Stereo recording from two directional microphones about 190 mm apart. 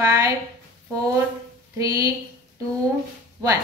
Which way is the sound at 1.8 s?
20° right (ahead or behind).